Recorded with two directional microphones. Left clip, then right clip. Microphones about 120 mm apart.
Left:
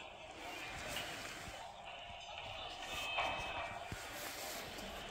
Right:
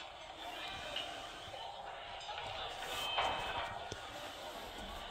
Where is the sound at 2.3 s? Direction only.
40° right (ahead or behind); by 3.7 s 25° right (ahead or behind).